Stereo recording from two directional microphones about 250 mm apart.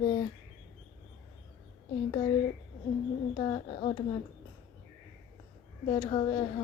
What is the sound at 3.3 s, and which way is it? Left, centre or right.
Speech, centre.